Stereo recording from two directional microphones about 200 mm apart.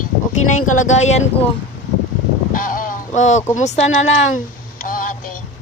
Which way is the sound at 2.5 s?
40° left (ahead or behind).